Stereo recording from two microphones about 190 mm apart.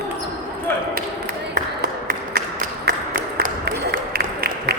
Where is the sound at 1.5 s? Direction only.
55° right (ahead or behind).